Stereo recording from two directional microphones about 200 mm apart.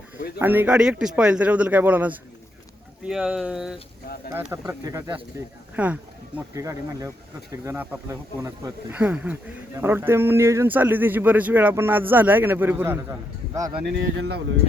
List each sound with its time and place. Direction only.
0.3 s speech: 10° right (ahead or behind)
13.8 s speech: 55° right (ahead or behind)